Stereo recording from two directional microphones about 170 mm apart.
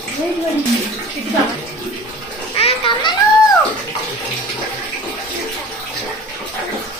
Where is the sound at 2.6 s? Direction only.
30° left (ahead or behind).